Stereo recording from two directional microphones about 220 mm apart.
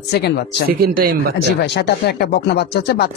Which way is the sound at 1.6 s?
50° left (ahead or behind).